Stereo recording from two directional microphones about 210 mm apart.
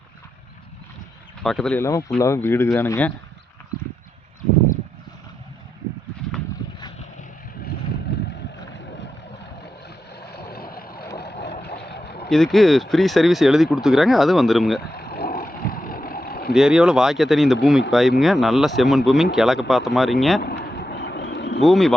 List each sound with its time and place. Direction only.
1.4 s speech: centre (ahead or behind)
6.2 s a sound: 5° left (ahead or behind)
10.2 s vehicle: 50° left (ahead or behind)
12.3 s speech: centre (ahead or behind)
14.8 s vehicle: 50° left (ahead or behind)
16.6 s speech: 5° right (ahead or behind)
20.4 s vehicle: 50° left (ahead or behind)
21.6 s speech: centre (ahead or behind)